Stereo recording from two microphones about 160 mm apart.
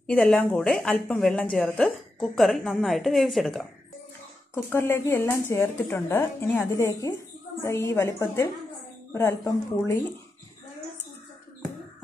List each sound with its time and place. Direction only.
0.0 s speech: 5° left (ahead or behind)
4.6 s speech: 15° left (ahead or behind)